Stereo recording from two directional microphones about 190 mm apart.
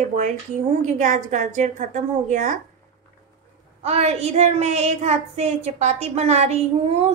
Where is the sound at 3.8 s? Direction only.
35° right (ahead or behind).